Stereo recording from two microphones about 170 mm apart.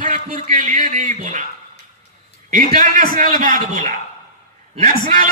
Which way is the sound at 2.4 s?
50° right (ahead or behind).